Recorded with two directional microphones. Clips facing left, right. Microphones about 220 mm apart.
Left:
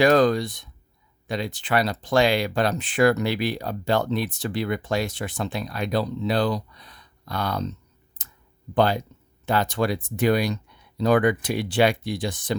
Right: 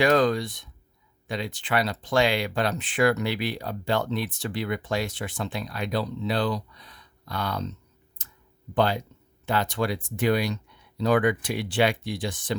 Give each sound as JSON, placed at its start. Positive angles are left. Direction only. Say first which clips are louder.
{"t": 0.0, "sound": "speech", "louder": "left 3 dB", "side_deg": 40}
{"t": 8.2, "sound": "a sound", "louder": "left 1 dB", "side_deg": 40}
{"t": 8.7, "sound": "speech", "louder": "left 3 dB", "side_deg": 40}